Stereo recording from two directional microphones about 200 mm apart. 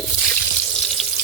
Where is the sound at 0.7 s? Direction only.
Centre (ahead or behind).